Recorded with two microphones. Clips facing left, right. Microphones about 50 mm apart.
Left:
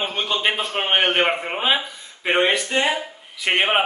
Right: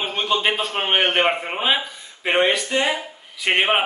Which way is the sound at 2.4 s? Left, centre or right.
Centre.